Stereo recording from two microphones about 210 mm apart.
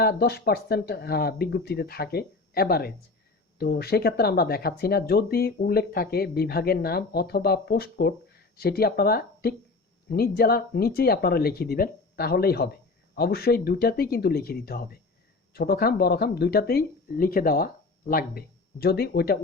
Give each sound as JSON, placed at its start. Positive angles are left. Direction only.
{"t": 0.0, "sound": "speech", "side_deg": 50}